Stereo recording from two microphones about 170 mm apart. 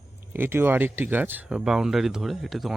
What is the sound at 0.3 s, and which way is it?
Speech, 15° right (ahead or behind).